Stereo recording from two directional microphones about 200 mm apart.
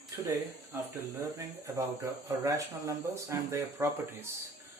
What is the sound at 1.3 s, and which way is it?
Speech, 15° right (ahead or behind).